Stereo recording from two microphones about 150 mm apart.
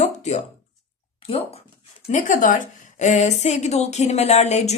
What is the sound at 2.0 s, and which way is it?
A woman's voice, 55° left (ahead or behind).